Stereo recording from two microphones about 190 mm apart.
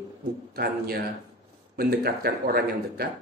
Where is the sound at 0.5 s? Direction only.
55° right (ahead or behind).